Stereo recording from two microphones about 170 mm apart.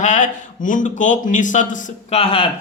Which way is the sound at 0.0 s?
45° left (ahead or behind).